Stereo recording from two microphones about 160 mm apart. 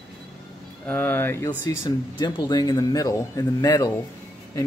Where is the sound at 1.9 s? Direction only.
25° left (ahead or behind).